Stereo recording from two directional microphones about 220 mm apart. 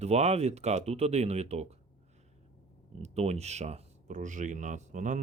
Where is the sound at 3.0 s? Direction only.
30° right (ahead or behind).